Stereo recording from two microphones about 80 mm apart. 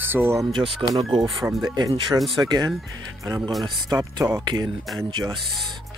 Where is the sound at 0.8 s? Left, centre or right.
Right.